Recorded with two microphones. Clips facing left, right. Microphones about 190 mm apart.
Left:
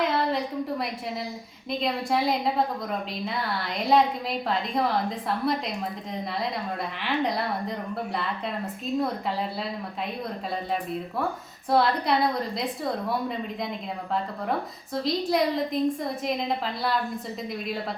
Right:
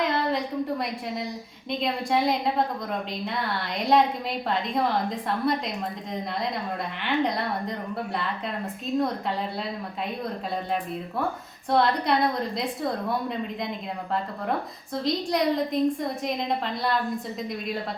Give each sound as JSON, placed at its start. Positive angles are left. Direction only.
{"t": 0.0, "sound": "a sound", "side_deg": 0}
{"t": 1.7, "sound": "a woman's voice", "side_deg": 0}
{"t": 7.0, "sound": "a woman's voice", "side_deg": 0}
{"t": 11.7, "sound": "a woman's voice", "side_deg": 0}
{"t": 14.9, "sound": "a woman's voice", "side_deg": 0}